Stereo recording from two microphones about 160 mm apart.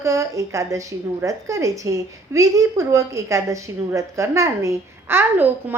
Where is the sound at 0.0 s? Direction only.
20° right (ahead or behind).